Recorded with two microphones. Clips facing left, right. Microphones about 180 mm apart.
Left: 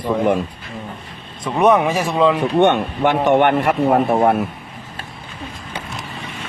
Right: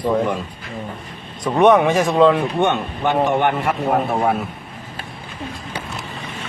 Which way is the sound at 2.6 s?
65° left (ahead or behind).